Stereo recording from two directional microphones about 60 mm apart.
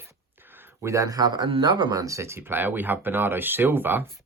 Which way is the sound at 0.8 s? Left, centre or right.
Right.